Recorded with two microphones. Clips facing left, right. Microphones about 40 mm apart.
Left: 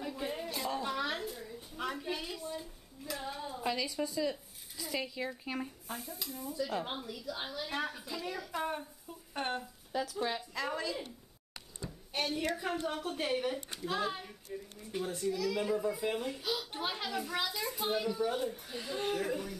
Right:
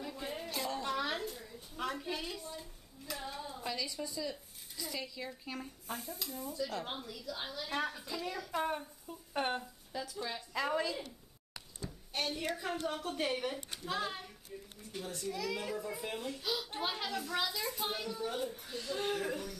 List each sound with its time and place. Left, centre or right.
0.0 s a sound: centre
4.9 s speech: centre
5.9 s stir: centre
11.8 s a sound: centre
12.8 s stir: centre
14.8 s speech: centre
16.0 s stir: centre
18.0 s speech: centre
19.0 s stir: centre